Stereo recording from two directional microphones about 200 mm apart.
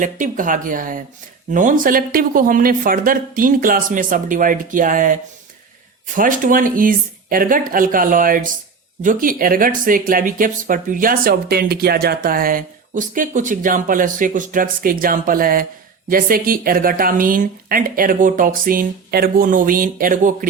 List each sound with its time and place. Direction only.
0.0 s speech: 40° right (ahead or behind)
6.1 s speech: 40° right (ahead or behind)